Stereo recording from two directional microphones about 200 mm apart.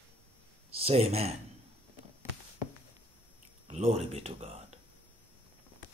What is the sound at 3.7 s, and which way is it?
Speech, 30° right (ahead or behind).